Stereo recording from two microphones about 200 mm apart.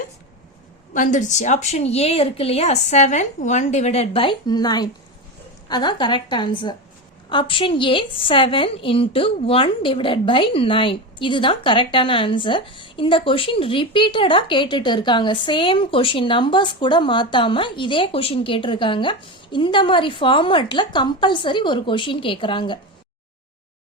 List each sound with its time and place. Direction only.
0.9 s a woman's voice: 40° left (ahead or behind); by 22.8 s 25° left (ahead or behind)